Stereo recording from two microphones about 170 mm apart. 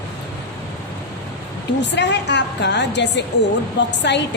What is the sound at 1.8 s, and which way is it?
A woman's voice, 90° left.